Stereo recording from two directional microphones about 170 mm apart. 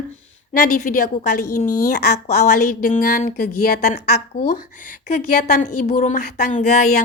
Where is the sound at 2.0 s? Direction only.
70° left (ahead or behind).